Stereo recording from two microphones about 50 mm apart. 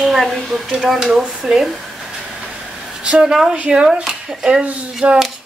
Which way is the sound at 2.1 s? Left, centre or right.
Centre.